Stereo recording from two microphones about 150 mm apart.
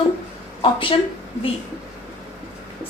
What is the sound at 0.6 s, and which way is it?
Speech, 35° left (ahead or behind).